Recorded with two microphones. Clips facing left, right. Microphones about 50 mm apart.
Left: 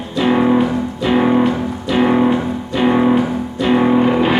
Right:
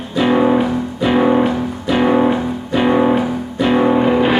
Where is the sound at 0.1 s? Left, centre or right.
Centre.